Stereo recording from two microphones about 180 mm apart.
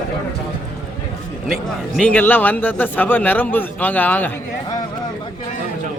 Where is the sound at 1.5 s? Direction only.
5° left (ahead or behind).